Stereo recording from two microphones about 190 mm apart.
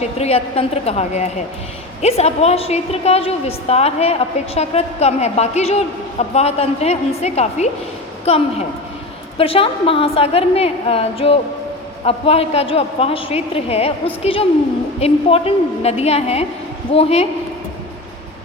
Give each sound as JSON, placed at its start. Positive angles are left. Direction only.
{"t": 0.0, "sound": "a woman's voice", "side_deg": 35}